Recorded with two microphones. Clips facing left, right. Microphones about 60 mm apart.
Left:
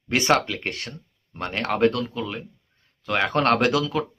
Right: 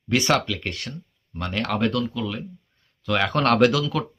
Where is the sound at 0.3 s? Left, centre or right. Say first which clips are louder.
Left 1 dB; left.